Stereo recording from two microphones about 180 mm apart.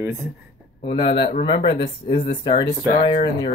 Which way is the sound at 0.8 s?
30° left (ahead or behind).